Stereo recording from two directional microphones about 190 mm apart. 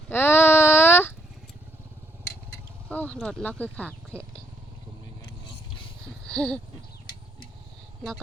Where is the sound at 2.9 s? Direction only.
5° left (ahead or behind).